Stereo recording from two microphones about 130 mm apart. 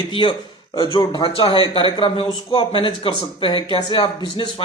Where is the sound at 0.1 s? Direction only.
40° left (ahead or behind).